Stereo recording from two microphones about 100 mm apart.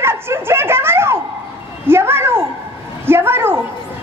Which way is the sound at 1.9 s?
25° right (ahead or behind).